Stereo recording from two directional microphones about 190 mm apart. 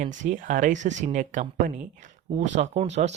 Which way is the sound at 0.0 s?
40° right (ahead or behind).